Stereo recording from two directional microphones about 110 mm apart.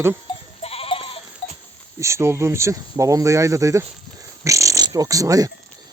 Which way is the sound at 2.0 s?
25° right (ahead or behind).